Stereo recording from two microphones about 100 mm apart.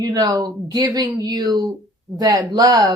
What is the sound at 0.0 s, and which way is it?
Speech, 40° right (ahead or behind).